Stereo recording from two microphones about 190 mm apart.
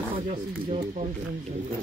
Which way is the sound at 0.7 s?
40° right (ahead or behind).